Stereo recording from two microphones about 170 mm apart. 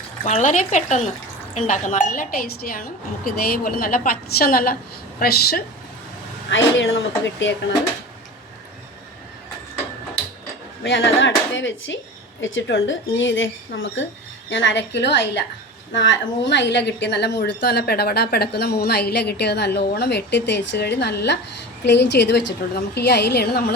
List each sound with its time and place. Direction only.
0.3 s a woman's voice: 45° left (ahead or behind); by 5.6 s 65° left (ahead or behind)
6.5 s a woman's voice: 90° left
10.8 s a woman's voice: 90° left
21.8 s a woman's voice: 90° left; by 23.7 s 65° left (ahead or behind)